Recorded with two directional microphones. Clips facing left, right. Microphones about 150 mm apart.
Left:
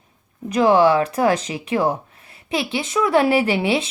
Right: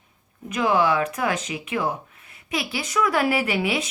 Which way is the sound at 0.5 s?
35° left (ahead or behind).